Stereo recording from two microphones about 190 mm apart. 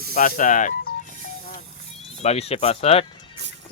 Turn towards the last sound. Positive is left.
turn(degrees=30)  # may be behind; listen again after turning